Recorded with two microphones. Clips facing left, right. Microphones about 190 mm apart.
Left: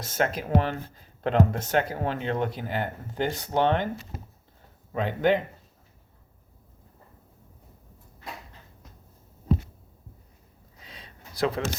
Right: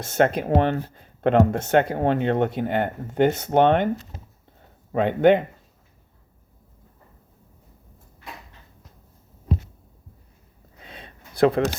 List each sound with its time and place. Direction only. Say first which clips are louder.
0.0 s speech: right 7 dB; 60° right (ahead or behind)
4.9 s speech: right 7 dB; 55° right (ahead or behind)
10.8 s a sound: right 5 dB; 55° right (ahead or behind)